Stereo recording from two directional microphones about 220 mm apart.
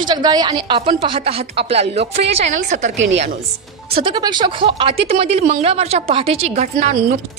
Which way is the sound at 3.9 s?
20° right (ahead or behind).